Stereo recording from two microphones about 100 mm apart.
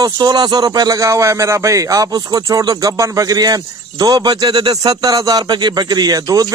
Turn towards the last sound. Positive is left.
turn(degrees=-40)  # may be behind; listen again after turning